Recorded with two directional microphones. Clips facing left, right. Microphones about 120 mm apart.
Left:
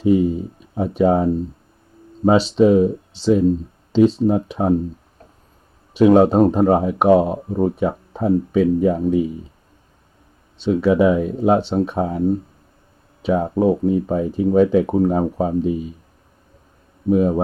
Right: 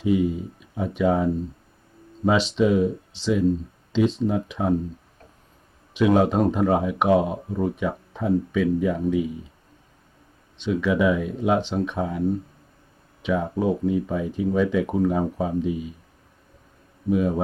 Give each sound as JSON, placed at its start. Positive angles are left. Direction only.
{"t": 0.0, "sound": "speech", "side_deg": 40}
{"t": 5.9, "sound": "speech", "side_deg": 35}
{"t": 10.6, "sound": "speech", "side_deg": 35}
{"t": 13.2, "sound": "speech", "side_deg": 35}
{"t": 17.1, "sound": "speech", "side_deg": 35}